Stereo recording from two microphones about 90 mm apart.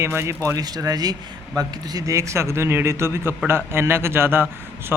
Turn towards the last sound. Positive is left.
turn(degrees=-20)  # may be behind; listen again after turning